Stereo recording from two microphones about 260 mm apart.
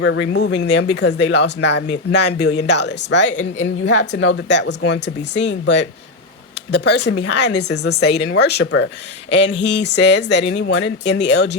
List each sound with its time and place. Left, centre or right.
0.0 s speech: left